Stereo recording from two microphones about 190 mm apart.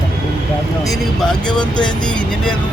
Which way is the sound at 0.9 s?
5° left (ahead or behind).